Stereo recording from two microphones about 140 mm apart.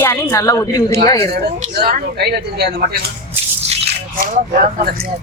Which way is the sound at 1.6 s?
90° right.